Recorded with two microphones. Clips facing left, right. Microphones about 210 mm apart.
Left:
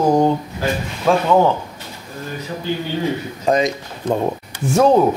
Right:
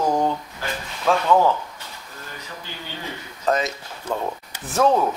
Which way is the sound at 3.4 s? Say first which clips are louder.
Left 5 dB; 15° left (ahead or behind).